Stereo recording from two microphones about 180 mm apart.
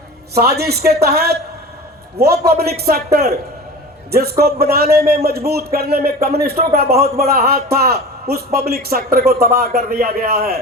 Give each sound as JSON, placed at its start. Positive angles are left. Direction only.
{"t": 0.3, "sound": "speech", "side_deg": -60}